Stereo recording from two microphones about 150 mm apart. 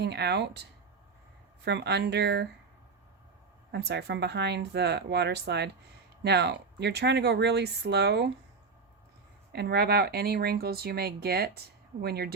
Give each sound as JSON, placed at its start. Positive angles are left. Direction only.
{"t": 0.1, "sound": "speech", "side_deg": -90}
{"t": 1.8, "sound": "speech", "side_deg": -90}
{"t": 3.8, "sound": "speech", "side_deg": -90}
{"t": 9.5, "sound": "speech", "side_deg": -90}